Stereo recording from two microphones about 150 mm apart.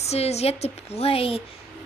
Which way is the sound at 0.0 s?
45° left (ahead or behind).